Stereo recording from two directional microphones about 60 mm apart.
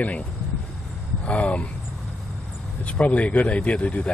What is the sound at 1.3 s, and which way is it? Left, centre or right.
Speech, left.